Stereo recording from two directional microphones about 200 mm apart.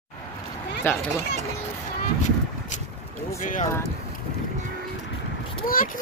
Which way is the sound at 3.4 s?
40° left (ahead or behind).